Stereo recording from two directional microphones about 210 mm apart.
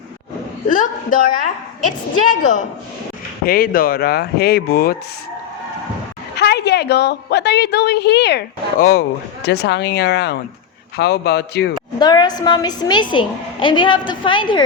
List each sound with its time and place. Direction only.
0.7 s speech: 40° left (ahead or behind)
2.3 s a woman's voice: 35° left (ahead or behind)
6.3 s a woman's voice: 55° left (ahead or behind)
11.9 s a woman's voice: 20° left (ahead or behind)